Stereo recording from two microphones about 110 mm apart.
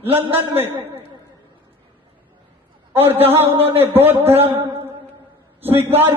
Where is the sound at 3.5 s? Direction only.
60° right (ahead or behind).